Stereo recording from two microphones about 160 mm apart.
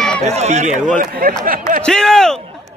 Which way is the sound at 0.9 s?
60° right (ahead or behind).